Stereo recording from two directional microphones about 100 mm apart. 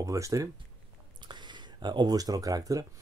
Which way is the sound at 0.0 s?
35° right (ahead or behind).